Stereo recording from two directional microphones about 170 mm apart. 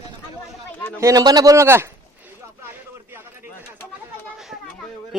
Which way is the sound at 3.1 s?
10° right (ahead or behind).